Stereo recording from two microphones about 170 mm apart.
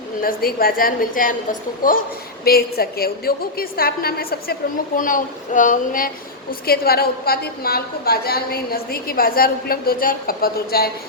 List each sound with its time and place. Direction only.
0.2 s a woman's voice: 60° left (ahead or behind)
2.4 s a woman's voice: 65° left (ahead or behind)
4.9 s speech: 50° left (ahead or behind)
6.5 s a woman's voice: 65° left (ahead or behind)